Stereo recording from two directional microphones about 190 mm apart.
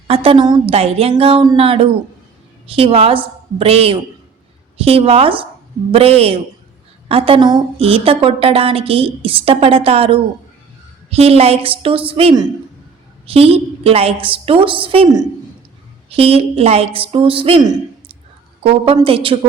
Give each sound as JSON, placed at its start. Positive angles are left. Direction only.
{"t": 0.1, "sound": "a woman's voice", "side_deg": -30}